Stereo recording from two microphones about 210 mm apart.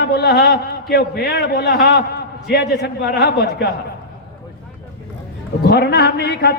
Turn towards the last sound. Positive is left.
turn(degrees=50)  # may be behind; listen again after turning